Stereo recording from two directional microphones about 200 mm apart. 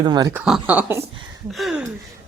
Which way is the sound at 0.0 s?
20° right (ahead or behind).